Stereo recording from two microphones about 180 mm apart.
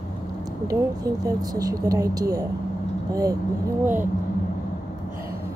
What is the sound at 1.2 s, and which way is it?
Speech, 20° right (ahead or behind).